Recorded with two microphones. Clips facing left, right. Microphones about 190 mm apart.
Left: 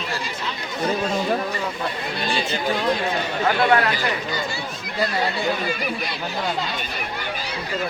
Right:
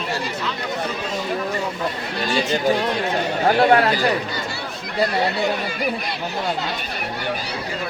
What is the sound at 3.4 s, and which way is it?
Speech, 35° right (ahead or behind).